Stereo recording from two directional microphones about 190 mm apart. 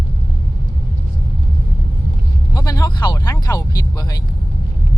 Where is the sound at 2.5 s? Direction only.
20° left (ahead or behind).